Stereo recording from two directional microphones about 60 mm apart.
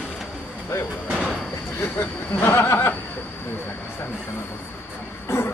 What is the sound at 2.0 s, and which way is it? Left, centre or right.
Speech, left.